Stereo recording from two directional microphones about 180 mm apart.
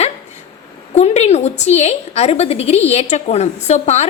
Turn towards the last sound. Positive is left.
turn(degrees=35)  # may be behind; listen again after turning